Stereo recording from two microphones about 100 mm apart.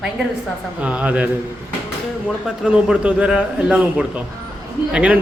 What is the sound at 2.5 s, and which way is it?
A man's voice, 10° right (ahead or behind).